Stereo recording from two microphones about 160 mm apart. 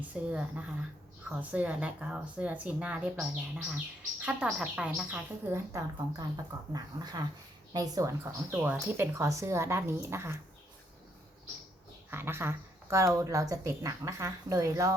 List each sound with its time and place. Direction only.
0.1 s speech: 10° right (ahead or behind)
5.5 s speech: 15° right (ahead or behind)
12.1 s speech: 15° right (ahead or behind)